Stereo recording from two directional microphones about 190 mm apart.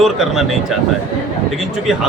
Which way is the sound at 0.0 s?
Centre (ahead or behind).